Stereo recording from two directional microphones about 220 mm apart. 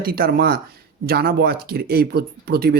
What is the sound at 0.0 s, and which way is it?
Speech, 45° right (ahead or behind).